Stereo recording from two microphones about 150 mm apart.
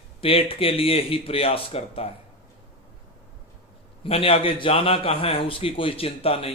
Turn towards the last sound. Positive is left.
turn(degrees=40)  # may be behind; listen again after turning